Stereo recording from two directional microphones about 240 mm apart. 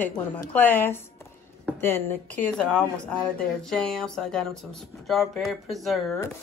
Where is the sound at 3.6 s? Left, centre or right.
Centre.